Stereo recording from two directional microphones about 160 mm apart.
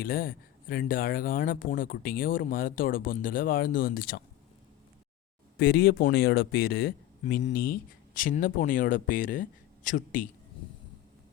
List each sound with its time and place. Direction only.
0.0 s speech: 65° left (ahead or behind)
5.5 s speech: 75° left (ahead or behind); by 10.2 s 55° left (ahead or behind)